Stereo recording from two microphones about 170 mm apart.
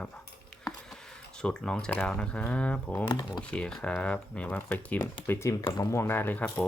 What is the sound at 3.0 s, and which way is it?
Speech, 25° left (ahead or behind).